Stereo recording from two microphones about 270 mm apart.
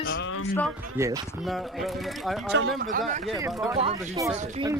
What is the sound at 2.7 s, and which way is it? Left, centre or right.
Speech, right.